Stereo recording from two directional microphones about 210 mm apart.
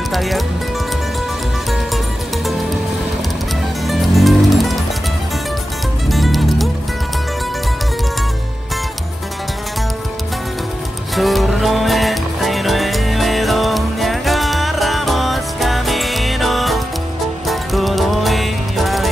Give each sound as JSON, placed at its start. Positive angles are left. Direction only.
{"t": 0.1, "sound": "speech", "side_deg": 0}
{"t": 3.8, "sound": "music", "side_deg": 0}
{"t": 6.0, "sound": "music", "side_deg": 0}
{"t": 11.1, "sound": "music", "side_deg": 0}